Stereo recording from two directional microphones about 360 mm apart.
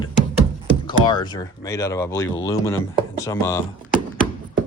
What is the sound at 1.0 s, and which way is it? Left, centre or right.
Speech, centre.